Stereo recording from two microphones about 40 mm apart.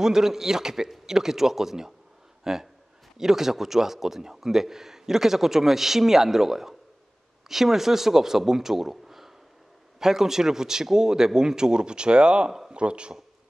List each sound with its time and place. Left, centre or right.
0.0 s a man's voice: centre